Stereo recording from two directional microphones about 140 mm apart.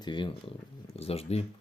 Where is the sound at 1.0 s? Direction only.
45° left (ahead or behind).